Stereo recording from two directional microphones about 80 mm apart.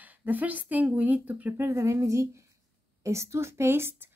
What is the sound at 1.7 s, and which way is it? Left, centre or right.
A woman's voice, right.